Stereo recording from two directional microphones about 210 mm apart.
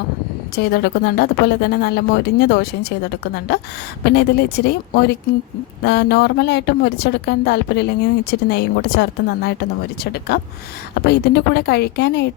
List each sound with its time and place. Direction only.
0.5 s a woman's voice: 50° left (ahead or behind)
4.0 s a woman's voice: 50° left (ahead or behind)